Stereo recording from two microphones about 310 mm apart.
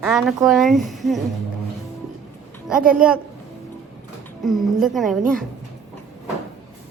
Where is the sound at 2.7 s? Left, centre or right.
Centre.